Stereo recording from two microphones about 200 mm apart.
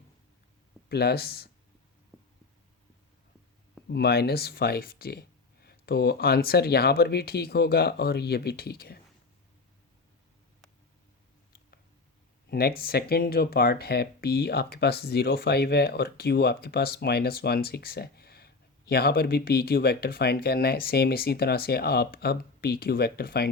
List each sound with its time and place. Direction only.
0.9 s speech: 55° left (ahead or behind)
3.8 s speech: 55° left (ahead or behind)
12.5 s speech: 50° left (ahead or behind)